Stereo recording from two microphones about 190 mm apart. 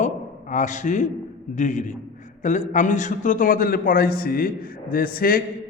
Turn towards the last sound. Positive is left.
turn(degrees=50)  # may be behind; listen again after turning